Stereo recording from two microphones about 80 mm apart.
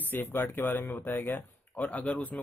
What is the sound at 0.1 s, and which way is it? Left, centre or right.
Speech, left.